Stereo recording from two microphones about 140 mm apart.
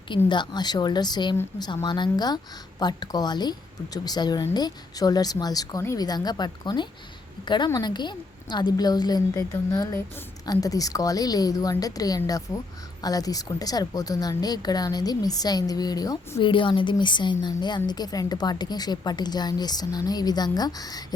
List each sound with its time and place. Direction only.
0.3 s a woman's voice: 30° left (ahead or behind)
16.5 s a woman's voice: 35° left (ahead or behind)